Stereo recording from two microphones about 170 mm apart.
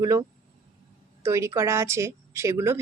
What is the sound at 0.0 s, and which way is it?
Speech, 20° right (ahead or behind).